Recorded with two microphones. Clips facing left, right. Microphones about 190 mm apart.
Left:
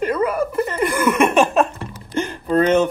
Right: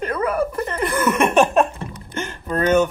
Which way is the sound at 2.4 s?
25° left (ahead or behind).